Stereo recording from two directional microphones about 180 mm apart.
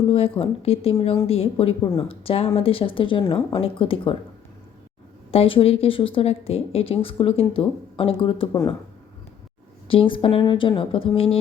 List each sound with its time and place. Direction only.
0.0 s a woman's voice: 30° left (ahead or behind)
5.3 s a woman's voice: 30° left (ahead or behind)
9.9 s speech: 30° left (ahead or behind)